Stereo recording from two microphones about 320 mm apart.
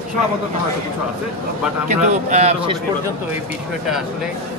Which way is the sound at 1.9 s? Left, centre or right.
Right.